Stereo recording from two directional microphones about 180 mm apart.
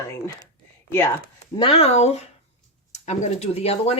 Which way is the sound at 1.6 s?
35° left (ahead or behind).